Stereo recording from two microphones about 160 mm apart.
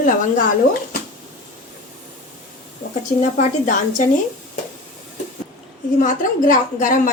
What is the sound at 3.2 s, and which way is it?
Speech, 50° left (ahead or behind).